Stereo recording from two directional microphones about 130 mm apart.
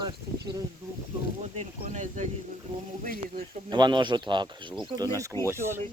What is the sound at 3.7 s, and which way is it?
Speech, 35° right (ahead or behind).